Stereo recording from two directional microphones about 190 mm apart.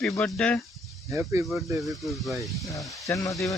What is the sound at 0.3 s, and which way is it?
Speech, 5° left (ahead or behind).